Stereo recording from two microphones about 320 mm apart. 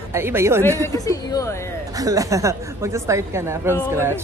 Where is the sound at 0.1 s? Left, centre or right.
Centre.